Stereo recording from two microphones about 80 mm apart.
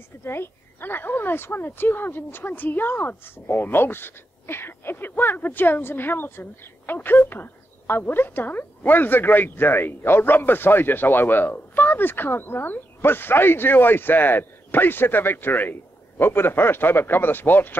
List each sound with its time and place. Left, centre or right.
0.2 s speech: left